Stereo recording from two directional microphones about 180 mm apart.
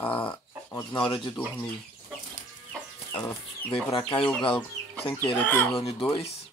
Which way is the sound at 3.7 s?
30° left (ahead or behind).